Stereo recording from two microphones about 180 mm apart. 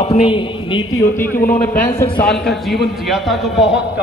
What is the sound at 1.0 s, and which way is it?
Speech, 15° left (ahead or behind).